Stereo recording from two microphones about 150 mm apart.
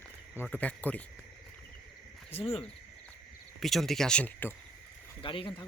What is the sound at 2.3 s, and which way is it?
Speech, 40° left (ahead or behind).